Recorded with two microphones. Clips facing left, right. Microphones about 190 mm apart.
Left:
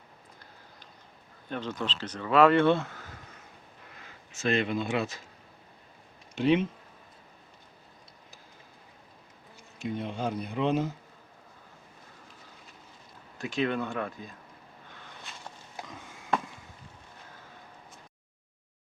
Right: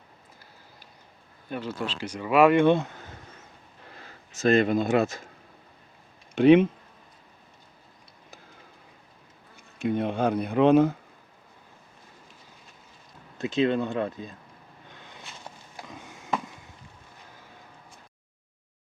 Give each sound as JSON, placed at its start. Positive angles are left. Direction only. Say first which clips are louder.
{"t": 1.5, "sound": "speech", "louder": "right 2 dB", "side_deg": -10}
{"t": 3.9, "sound": "speech", "louder": "right 3 dB", "side_deg": -40}
{"t": 6.3, "sound": "speech", "louder": "right 8 dB", "side_deg": -60}
{"t": 9.7, "sound": "speech", "louder": "right 7 dB", "side_deg": -60}
{"t": 13.4, "sound": "speech", "louder": "right 5 dB", "side_deg": -20}